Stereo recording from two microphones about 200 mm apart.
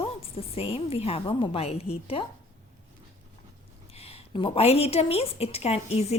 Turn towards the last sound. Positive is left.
turn(degrees=30)  # may be behind; listen again after turning